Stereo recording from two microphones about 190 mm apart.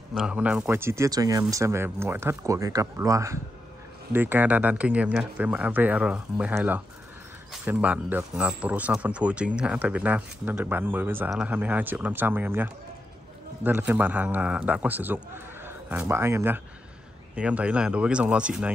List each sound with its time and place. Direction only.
0.1 s speech: 5° right (ahead or behind)